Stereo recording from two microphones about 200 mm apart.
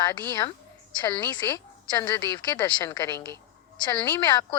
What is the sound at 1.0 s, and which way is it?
A woman's voice, 20° left (ahead or behind).